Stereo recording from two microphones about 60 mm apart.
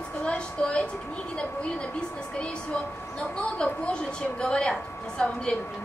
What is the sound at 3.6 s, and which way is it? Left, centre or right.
A woman's voice, centre.